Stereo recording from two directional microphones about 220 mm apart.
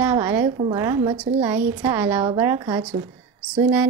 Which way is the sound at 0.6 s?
15° right (ahead or behind).